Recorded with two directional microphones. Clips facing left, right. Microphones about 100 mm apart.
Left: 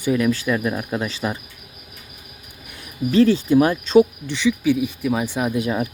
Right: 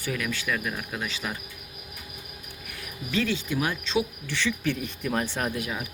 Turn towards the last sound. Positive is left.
turn(degrees=10)  # may be behind; listen again after turning